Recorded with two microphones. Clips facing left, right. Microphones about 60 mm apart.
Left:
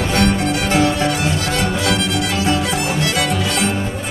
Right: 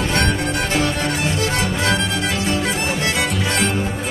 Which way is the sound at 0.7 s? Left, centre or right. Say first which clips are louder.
Left 6 dB; left.